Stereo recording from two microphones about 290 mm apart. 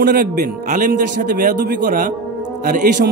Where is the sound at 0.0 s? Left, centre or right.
Right.